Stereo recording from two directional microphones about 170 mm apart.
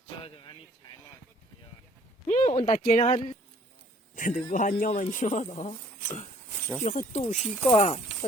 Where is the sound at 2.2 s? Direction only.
45° left (ahead or behind).